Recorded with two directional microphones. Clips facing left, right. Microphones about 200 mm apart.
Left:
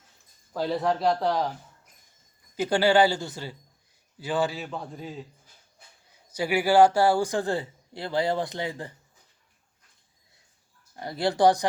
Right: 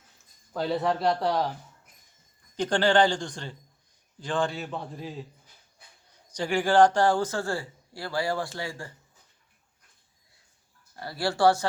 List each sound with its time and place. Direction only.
0.5 s speech: centre (ahead or behind)
2.6 s a man's voice: 10° left (ahead or behind)
6.3 s a man's voice: 10° left (ahead or behind)
10.9 s speech: 20° left (ahead or behind)